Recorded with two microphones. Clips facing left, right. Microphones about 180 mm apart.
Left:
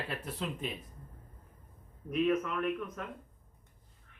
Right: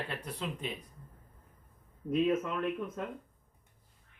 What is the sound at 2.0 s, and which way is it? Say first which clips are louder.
Speech: right 1 dB; 25° right (ahead or behind).